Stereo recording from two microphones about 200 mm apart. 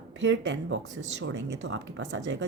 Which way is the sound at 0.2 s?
65° right (ahead or behind).